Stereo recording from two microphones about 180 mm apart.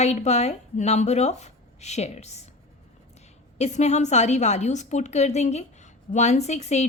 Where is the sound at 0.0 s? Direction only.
40° left (ahead or behind).